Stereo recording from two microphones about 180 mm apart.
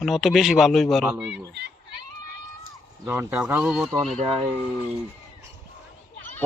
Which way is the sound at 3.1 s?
15° right (ahead or behind).